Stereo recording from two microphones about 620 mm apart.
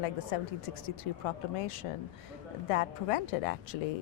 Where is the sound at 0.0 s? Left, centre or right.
Left.